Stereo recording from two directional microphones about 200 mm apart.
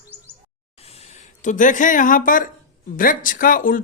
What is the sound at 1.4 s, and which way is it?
Speech, 40° left (ahead or behind).